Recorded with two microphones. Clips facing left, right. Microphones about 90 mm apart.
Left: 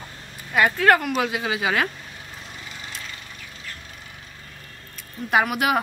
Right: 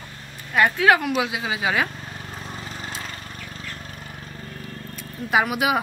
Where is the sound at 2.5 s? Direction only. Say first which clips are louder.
Right 5 dB; 40° right (ahead or behind).